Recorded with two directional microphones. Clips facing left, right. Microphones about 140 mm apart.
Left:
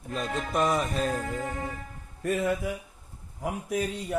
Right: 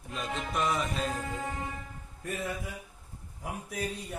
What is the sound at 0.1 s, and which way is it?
Music, 45° left (ahead or behind).